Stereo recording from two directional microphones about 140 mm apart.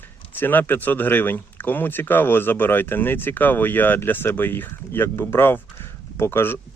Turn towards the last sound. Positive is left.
turn(degrees=15)  # may be behind; listen again after turning